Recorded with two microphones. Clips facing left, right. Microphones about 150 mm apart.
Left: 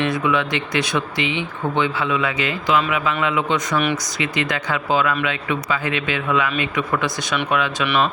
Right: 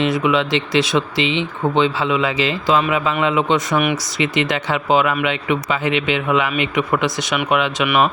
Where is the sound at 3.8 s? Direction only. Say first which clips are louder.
Right 2 dB; 15° right (ahead or behind).